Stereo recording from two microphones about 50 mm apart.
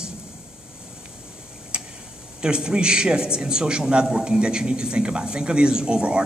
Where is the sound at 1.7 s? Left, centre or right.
Centre.